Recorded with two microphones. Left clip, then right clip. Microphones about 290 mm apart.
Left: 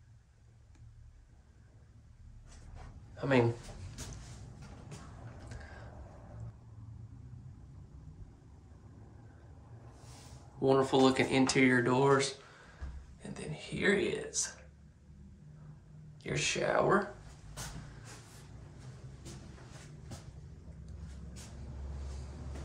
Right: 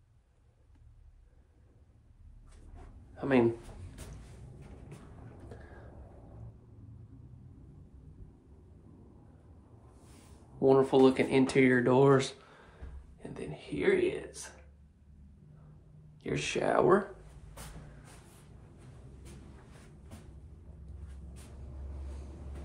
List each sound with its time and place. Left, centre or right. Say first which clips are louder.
3.2 s speech: right 1 dB; centre
10.6 s speech: right 3 dB; centre
16.2 s speech: even; centre